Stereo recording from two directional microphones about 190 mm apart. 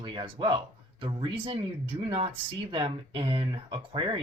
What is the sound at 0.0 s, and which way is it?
Speech, 25° right (ahead or behind).